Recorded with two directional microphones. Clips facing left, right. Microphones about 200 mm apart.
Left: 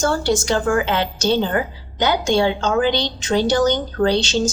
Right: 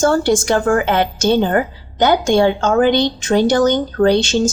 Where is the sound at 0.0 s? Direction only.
50° right (ahead or behind).